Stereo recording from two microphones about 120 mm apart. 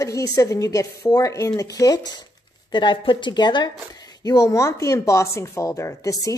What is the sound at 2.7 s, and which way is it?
A woman's voice, 45° left (ahead or behind).